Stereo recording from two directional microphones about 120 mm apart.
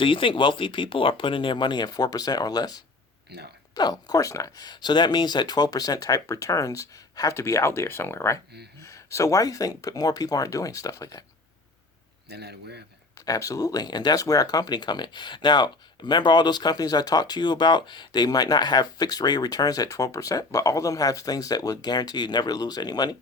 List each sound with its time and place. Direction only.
0.0 s speech: 45° left (ahead or behind)
3.8 s speech: 30° left (ahead or behind)
13.2 s speech: 30° left (ahead or behind)